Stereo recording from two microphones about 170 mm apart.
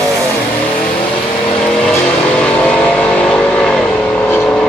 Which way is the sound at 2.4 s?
5° left (ahead or behind).